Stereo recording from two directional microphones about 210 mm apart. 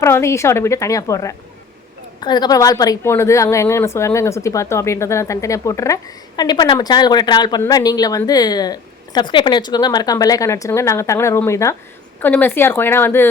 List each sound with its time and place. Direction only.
0.0 s a woman's voice: 15° left (ahead or behind)